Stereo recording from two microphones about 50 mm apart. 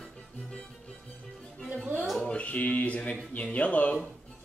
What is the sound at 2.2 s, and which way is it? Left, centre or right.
Speech, left.